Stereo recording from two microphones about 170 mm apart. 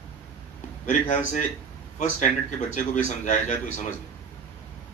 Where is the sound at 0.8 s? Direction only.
45° left (ahead or behind).